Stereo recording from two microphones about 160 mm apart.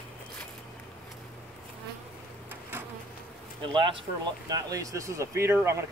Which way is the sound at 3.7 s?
30° right (ahead or behind).